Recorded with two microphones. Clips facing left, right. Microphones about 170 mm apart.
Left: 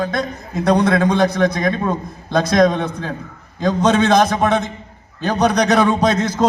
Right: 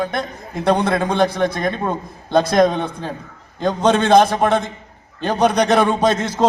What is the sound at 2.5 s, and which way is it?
Speech, 5° right (ahead or behind).